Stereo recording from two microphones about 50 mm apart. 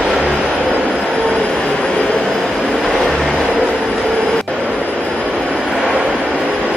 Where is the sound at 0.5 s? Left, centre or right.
Right.